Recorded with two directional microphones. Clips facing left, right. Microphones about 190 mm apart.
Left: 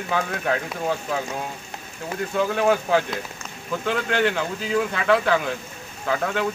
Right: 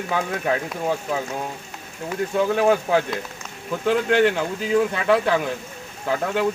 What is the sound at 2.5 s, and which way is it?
Speech, 15° right (ahead or behind).